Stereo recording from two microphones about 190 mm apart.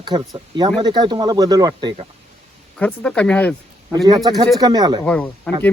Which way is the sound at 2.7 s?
5° left (ahead or behind).